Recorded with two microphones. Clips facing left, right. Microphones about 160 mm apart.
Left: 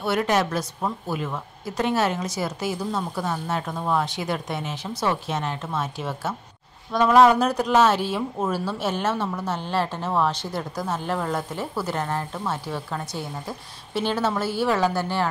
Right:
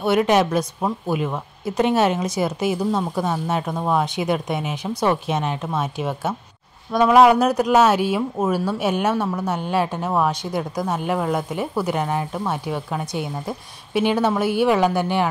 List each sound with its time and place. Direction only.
0.0 s a woman's voice: 20° right (ahead or behind)